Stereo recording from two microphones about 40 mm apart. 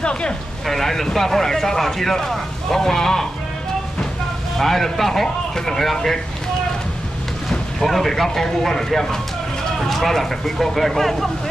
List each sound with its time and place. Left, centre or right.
0.0 s speech: left
0.7 s speech: centre
4.6 s speech: centre
7.8 s speech: centre